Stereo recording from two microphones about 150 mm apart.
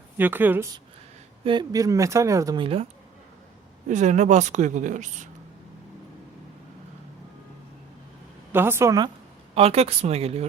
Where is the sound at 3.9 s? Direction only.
55° right (ahead or behind).